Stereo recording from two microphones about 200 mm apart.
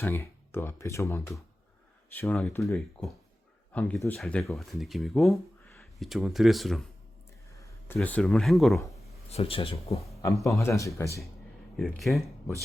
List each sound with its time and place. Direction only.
0.0 s speech: 10° left (ahead or behind)
2.7 s speech: centre (ahead or behind)
7.5 s a sound: 15° left (ahead or behind)
7.9 s speech: 5° left (ahead or behind)
9.3 s a man's voice: 30° left (ahead or behind)
10.6 s speech: 15° left (ahead or behind)
11.8 s speech: centre (ahead or behind)